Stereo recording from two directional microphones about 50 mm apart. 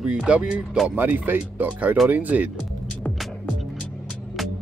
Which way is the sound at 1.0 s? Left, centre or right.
Right.